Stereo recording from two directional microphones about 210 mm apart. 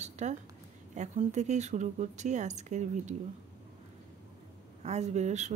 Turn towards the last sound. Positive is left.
turn(degrees=-35)  # may be behind; listen again after turning